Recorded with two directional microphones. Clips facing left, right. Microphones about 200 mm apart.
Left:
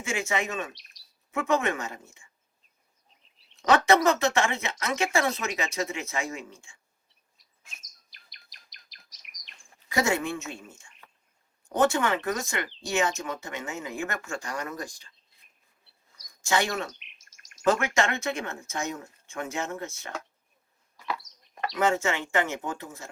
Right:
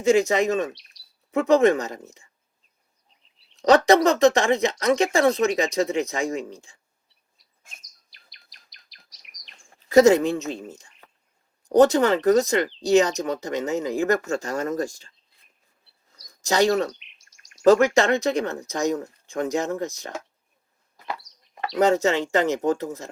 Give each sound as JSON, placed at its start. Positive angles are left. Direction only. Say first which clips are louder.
{"t": 0.0, "sound": "speech", "louder": "right 11 dB", "side_deg": -35}
{"t": 0.8, "sound": "chirp", "louder": "even", "side_deg": 50}
{"t": 1.3, "sound": "speech", "louder": "right 9 dB", "side_deg": -35}
{"t": 3.5, "sound": "speech", "louder": "right 5 dB", "side_deg": -35}
{"t": 7.8, "sound": "bird vocalization", "louder": "even", "side_deg": 50}
{"t": 9.9, "sound": "speech", "louder": "right 12 dB", "side_deg": -40}
{"t": 16.4, "sound": "speech", "louder": "right 8 dB", "side_deg": -40}
{"t": 17.0, "sound": "chirp", "louder": "left 1 dB", "side_deg": 50}
{"t": 17.7, "sound": "speech", "louder": "right 9 dB", "side_deg": -35}
{"t": 21.3, "sound": "chicken", "louder": "even", "side_deg": 45}
{"t": 21.8, "sound": "speech", "louder": "right 7 dB", "side_deg": -35}